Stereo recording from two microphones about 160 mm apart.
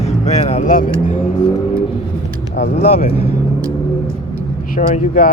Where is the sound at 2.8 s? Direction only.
40° left (ahead or behind).